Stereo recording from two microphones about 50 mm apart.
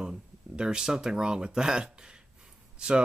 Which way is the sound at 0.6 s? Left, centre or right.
Centre.